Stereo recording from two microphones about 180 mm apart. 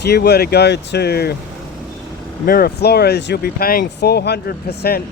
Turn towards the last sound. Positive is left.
turn(degrees=60)  # may be behind; listen again after turning